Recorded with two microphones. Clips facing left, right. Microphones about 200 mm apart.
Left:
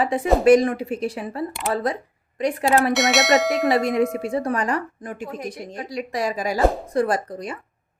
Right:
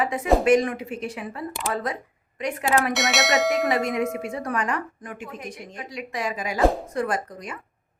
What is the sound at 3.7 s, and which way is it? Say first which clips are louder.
Speech: left 4 dB; 35° left (ahead or behind).